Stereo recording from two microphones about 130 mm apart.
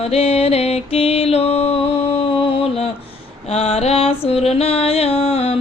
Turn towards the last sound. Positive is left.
turn(degrees=50)  # may be behind; listen again after turning